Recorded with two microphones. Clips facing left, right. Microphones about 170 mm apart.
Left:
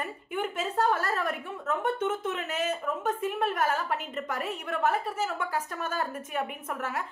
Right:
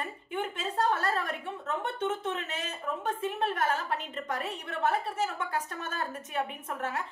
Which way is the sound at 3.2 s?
30° right (ahead or behind).